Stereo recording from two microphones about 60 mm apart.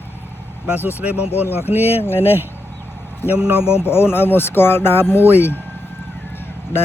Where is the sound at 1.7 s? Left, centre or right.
Right.